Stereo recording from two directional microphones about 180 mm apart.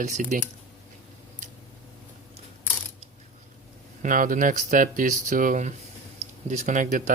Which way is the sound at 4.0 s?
45° right (ahead or behind).